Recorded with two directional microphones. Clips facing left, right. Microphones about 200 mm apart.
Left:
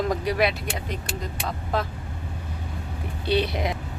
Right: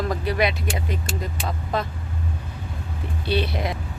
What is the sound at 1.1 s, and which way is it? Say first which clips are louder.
Speech: right 3 dB; 60° left (ahead or behind).